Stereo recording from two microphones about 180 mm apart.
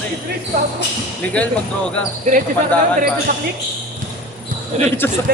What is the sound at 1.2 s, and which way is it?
Speech, 5° left (ahead or behind).